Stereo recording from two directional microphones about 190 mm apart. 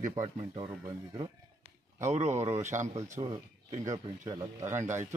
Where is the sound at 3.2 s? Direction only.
25° right (ahead or behind).